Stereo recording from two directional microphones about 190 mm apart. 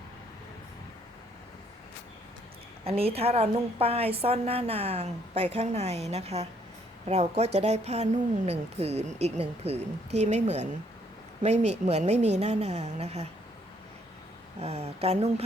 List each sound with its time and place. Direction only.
2.8 s a woman's voice: 30° right (ahead or behind)
14.6 s a woman's voice: 35° right (ahead or behind)